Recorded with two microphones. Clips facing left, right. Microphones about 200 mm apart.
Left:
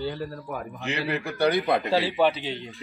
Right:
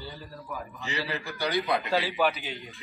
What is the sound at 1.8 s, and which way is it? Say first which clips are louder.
Speech: left 4 dB; 30° left (ahead or behind).